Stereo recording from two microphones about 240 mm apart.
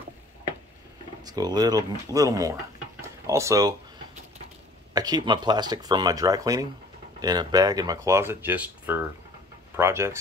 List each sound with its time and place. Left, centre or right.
1.2 s speech: centre
3.0 s a sound: centre
4.9 s speech: centre